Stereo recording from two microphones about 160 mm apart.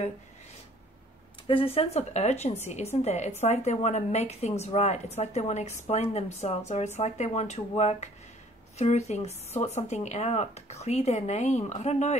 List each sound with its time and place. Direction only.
1.5 s a woman's voice: 35° left (ahead or behind)